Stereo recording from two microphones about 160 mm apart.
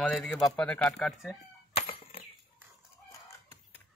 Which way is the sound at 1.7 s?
35° left (ahead or behind).